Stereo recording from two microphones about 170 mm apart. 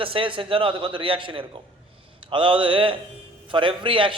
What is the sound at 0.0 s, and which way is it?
A man's voice, 30° right (ahead or behind).